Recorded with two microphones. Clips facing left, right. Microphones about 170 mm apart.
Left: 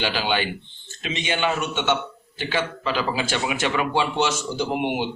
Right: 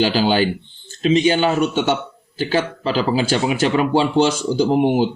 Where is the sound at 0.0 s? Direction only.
35° right (ahead or behind).